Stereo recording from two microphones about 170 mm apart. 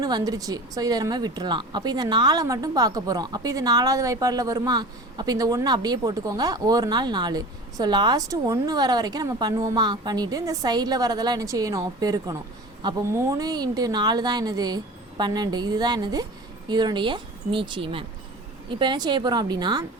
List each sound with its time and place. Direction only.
0.0 s a woman's voice: 20° right (ahead or behind)